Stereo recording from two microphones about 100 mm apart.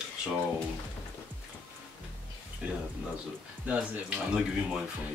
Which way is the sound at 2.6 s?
10° right (ahead or behind).